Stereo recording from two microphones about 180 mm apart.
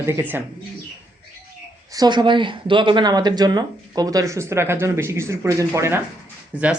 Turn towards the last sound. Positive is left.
turn(degrees=-5)  # may be behind; listen again after turning